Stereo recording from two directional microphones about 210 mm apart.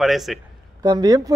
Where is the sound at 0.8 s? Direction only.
20° right (ahead or behind).